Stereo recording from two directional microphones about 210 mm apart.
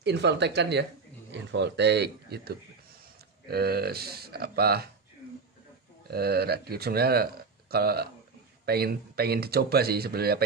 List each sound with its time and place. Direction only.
0.0 s speech: 55° right (ahead or behind)
6.0 s speech: 50° right (ahead or behind)